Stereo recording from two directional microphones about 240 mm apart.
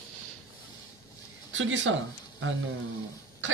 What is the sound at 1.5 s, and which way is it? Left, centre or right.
Speech, right.